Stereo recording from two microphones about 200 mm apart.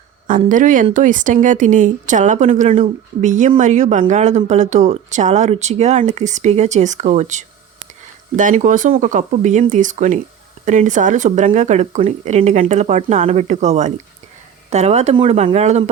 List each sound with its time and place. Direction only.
0.3 s speech: 40° right (ahead or behind)